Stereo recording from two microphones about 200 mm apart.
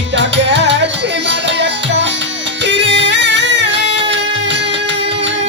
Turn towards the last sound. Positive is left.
turn(degrees=-60)  # may be behind; listen again after turning